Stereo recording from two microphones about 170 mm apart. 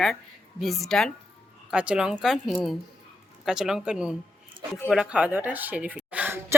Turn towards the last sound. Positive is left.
turn(degrees=-10)  # may be behind; listen again after turning